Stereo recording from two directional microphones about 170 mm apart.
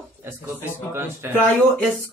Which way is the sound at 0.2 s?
15° right (ahead or behind).